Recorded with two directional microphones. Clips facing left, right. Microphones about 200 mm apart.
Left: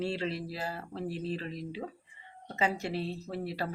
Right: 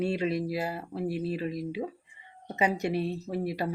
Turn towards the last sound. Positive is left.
turn(degrees=-15)  # may be behind; listen again after turning